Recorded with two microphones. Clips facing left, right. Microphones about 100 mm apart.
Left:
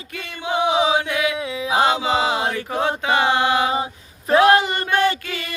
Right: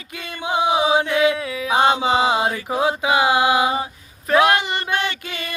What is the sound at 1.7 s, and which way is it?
Mantra, 25° right (ahead or behind).